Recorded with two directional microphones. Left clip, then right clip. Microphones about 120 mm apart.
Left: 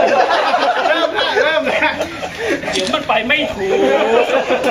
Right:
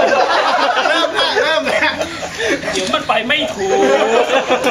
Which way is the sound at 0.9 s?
30° right (ahead or behind).